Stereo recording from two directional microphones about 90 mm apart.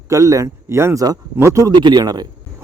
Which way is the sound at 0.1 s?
35° right (ahead or behind).